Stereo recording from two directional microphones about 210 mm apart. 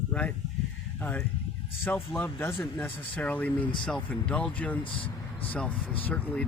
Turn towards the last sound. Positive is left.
turn(degrees=5)  # may be behind; listen again after turning